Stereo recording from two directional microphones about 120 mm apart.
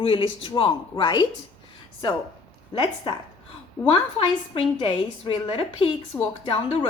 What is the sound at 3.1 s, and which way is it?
A woman's voice, 45° left (ahead or behind).